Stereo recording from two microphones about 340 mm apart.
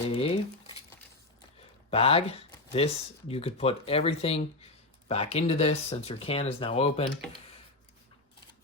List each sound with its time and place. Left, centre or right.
0.1 s crumpling: centre
1.9 s speech: centre